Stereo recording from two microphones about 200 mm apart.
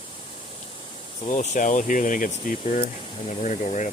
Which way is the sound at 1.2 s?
35° left (ahead or behind).